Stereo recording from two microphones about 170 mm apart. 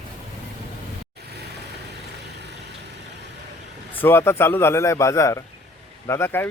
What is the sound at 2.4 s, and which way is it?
Vehicle, 80° right.